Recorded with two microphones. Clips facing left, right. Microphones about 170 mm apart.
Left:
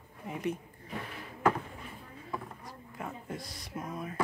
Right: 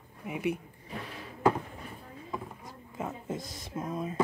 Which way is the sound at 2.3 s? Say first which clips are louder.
Right 1 dB; 20° right (ahead or behind).